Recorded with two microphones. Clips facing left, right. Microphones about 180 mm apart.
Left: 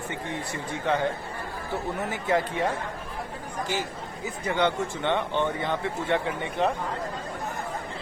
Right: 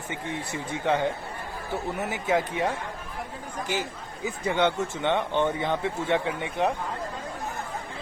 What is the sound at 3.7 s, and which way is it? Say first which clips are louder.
Speech: right 2 dB; 15° right (ahead or behind).